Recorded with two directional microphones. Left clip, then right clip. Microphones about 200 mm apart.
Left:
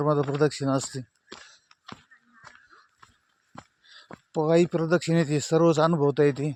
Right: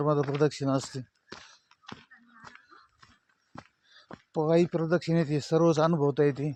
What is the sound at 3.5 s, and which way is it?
Speech, 25° left (ahead or behind).